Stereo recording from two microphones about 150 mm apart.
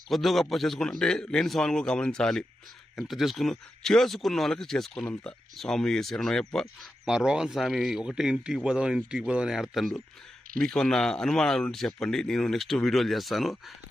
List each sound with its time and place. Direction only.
0.1 s speech: centre (ahead or behind)